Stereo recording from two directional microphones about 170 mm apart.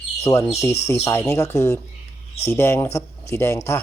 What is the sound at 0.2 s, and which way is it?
Speech, 15° left (ahead or behind).